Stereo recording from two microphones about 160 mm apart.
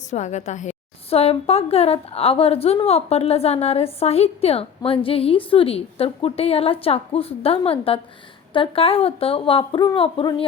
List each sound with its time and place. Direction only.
0.1 s a woman's voice: 45° left (ahead or behind)